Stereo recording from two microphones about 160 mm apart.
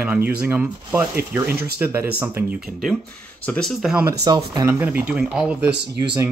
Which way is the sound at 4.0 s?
20° right (ahead or behind).